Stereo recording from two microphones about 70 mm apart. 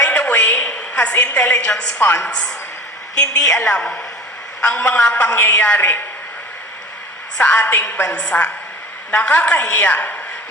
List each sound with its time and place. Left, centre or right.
0.0 s a sound: left
1.7 s a woman's voice: left
3.3 s a woman's voice: left
3.6 s a woman's voice: centre
7.3 s a woman's voice: centre